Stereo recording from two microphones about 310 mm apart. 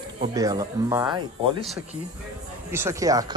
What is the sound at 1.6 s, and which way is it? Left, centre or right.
Speech, centre.